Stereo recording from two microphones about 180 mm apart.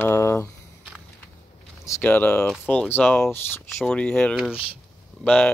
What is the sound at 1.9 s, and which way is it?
Speech, 10° left (ahead or behind).